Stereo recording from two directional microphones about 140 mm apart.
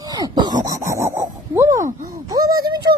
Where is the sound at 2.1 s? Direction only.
25° right (ahead or behind).